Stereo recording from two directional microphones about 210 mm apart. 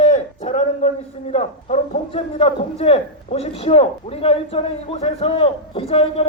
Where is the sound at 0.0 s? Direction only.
30° left (ahead or behind).